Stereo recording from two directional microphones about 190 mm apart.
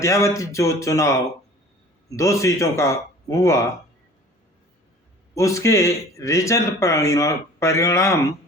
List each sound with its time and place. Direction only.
0.0 s speech: 15° left (ahead or behind)
5.3 s speech: 15° left (ahead or behind)